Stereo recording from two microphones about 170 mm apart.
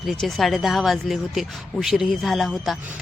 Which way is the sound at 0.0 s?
Centre (ahead or behind).